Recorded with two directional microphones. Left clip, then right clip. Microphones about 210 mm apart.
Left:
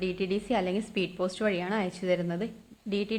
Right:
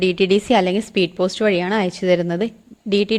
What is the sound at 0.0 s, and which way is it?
A woman's voice, 40° right (ahead or behind).